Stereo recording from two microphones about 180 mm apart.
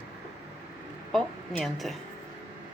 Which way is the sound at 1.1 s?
Centre (ahead or behind).